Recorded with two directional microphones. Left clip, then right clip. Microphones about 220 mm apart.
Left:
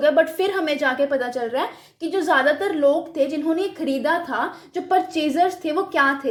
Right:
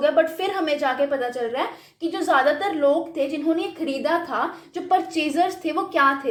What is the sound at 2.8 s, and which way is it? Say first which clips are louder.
Speech: left 2 dB; 25° left (ahead or behind).